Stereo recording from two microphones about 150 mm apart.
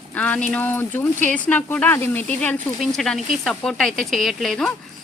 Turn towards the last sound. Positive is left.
turn(degrees=5)  # may be behind; listen again after turning